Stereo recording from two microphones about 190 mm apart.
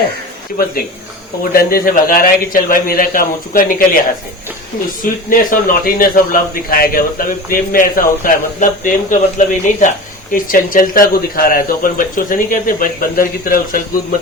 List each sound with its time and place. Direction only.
1.5 s a man's voice: 50° left (ahead or behind)
5.3 s a man's voice: 45° left (ahead or behind)